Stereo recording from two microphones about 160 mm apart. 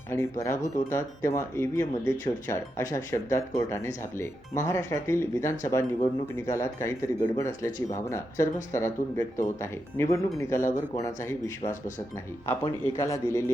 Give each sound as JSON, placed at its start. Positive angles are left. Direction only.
{"t": 0.1, "sound": "speech", "side_deg": 15}
{"t": 8.7, "sound": "speech", "side_deg": 15}
{"t": 11.6, "sound": "speech", "side_deg": 50}
{"t": 12.6, "sound": "speech", "side_deg": 20}